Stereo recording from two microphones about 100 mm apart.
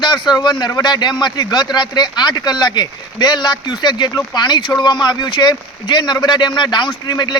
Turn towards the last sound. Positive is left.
turn(degrees=50)  # may be behind; listen again after turning